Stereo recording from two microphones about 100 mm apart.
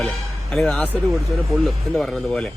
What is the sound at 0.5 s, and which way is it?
Speech, centre (ahead or behind).